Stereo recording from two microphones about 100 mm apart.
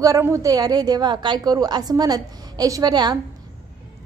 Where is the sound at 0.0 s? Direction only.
30° right (ahead or behind).